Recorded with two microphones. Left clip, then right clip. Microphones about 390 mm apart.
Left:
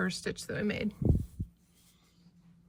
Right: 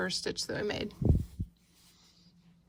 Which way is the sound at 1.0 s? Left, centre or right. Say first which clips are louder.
Even; centre.